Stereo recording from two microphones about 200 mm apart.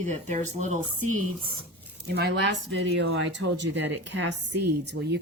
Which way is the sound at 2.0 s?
55° right (ahead or behind).